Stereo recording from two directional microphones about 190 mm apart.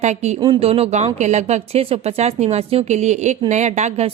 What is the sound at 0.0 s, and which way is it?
Speech, 35° right (ahead or behind).